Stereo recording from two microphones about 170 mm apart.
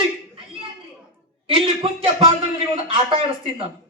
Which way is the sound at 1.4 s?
35° right (ahead or behind).